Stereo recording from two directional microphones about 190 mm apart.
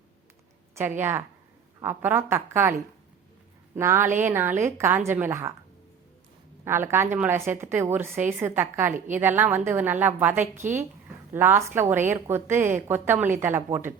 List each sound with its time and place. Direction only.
0.8 s a woman's voice: 10° right (ahead or behind)
3.8 s a woman's voice: 15° right (ahead or behind)
6.7 s a woman's voice: 10° right (ahead or behind)